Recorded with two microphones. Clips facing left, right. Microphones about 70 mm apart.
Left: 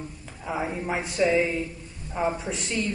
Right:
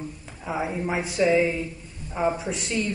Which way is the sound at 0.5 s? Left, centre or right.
Centre.